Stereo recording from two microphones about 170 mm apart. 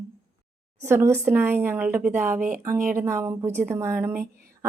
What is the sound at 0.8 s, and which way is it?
A woman's voice, 15° right (ahead or behind).